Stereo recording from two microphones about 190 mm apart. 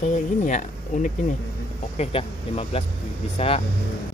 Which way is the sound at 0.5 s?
40° left (ahead or behind).